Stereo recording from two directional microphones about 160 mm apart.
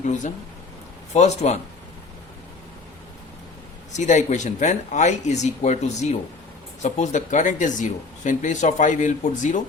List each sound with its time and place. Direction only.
1.1 s speech: 45° left (ahead or behind)
3.9 s speech: 50° left (ahead or behind)